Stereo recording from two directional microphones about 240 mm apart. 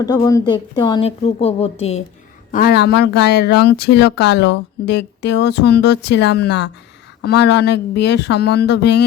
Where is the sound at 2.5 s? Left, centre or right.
Left.